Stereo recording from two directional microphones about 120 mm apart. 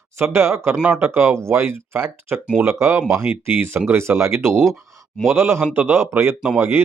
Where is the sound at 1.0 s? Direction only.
20° right (ahead or behind).